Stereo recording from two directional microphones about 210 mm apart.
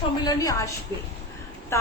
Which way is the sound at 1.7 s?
15° left (ahead or behind).